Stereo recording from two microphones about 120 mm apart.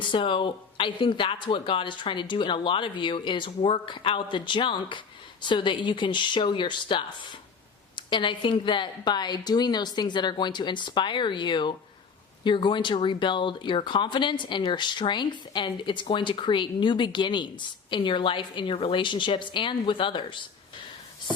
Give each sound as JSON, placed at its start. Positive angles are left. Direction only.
{"t": 0.1, "sound": "speech", "side_deg": 45}